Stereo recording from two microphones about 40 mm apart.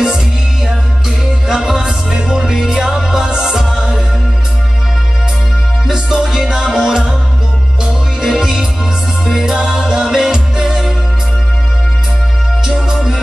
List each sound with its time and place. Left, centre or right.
1.5 s music: centre
5.9 s music: centre
8.2 s music: centre
12.6 s music: centre